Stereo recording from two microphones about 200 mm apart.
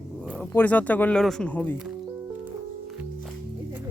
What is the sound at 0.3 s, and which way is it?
Speech, 10° left (ahead or behind).